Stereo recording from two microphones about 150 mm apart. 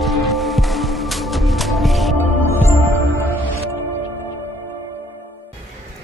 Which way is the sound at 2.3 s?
15° left (ahead or behind).